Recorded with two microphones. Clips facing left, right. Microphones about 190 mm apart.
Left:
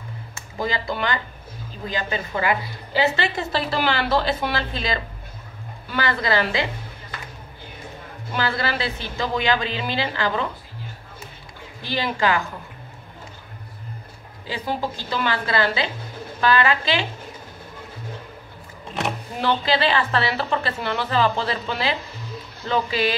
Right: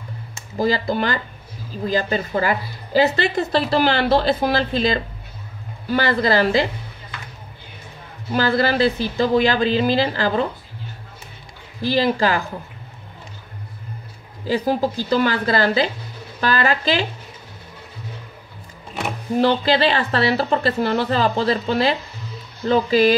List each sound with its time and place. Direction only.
0.6 s a woman's voice: 40° right (ahead or behind)
8.3 s a woman's voice: 40° right (ahead or behind)
11.8 s a woman's voice: 35° right (ahead or behind)
14.5 s a woman's voice: 40° right (ahead or behind)
19.4 s a woman's voice: 35° right (ahead or behind)